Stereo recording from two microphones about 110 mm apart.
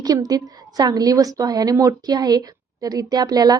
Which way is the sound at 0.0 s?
35° right (ahead or behind).